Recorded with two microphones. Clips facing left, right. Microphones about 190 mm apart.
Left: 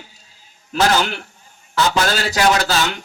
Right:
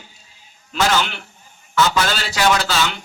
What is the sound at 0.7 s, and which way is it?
A man's voice, 40° left (ahead or behind).